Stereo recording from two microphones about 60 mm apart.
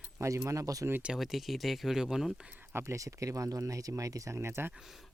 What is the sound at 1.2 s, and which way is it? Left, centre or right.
Speech, centre.